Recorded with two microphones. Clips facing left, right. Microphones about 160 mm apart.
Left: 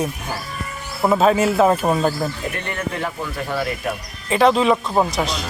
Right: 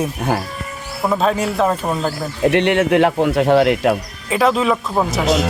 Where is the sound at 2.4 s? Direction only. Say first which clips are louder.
Right 12 dB; 80° right.